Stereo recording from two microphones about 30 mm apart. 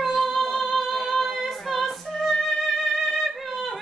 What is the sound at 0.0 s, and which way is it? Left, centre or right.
Music, centre.